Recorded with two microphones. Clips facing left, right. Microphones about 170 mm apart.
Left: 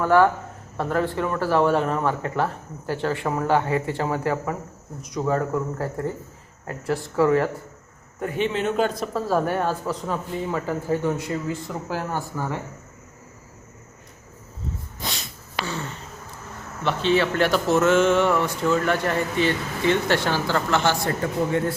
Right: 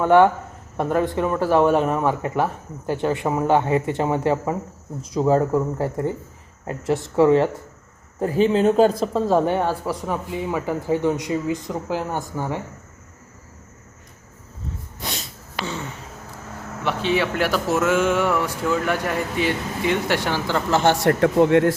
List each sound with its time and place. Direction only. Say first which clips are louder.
0.0 s speech: right 3 dB; 20° right (ahead or behind)
8.2 s a man's voice: right 7 dB; 35° right (ahead or behind)
9.1 s speech: right 4 dB; 20° right (ahead or behind)
15.6 s a sound: right 2 dB; 20° right (ahead or behind)
16.8 s speech: left 1 dB; 10° right (ahead or behind)
20.8 s speech: right 6 dB; 70° right (ahead or behind)